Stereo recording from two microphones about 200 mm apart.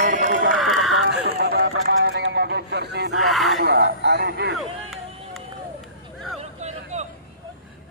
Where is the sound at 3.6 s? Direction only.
50° right (ahead or behind).